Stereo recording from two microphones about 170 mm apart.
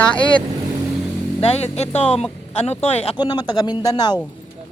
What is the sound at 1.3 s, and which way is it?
Speech, 35° left (ahead or behind).